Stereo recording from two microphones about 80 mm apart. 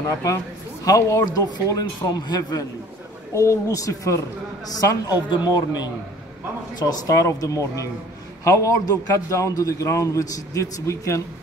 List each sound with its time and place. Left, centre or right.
0.8 s a man's voice: left
3.3 s a man's voice: left
5.3 s a man's voice: left